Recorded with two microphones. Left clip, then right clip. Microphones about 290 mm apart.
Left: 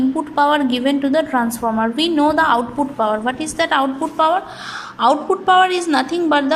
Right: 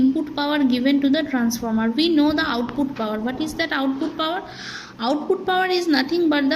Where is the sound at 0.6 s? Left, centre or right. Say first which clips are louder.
Left 1 dB; centre.